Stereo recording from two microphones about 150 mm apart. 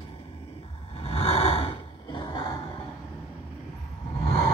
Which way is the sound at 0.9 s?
40° left (ahead or behind).